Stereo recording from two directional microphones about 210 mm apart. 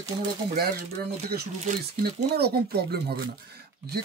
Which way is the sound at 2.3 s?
50° right (ahead or behind).